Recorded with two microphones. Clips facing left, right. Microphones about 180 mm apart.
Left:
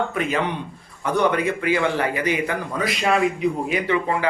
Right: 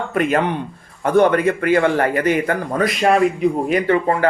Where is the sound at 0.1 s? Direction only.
55° right (ahead or behind).